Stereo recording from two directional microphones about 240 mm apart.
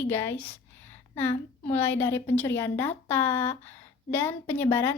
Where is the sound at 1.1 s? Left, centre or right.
Left.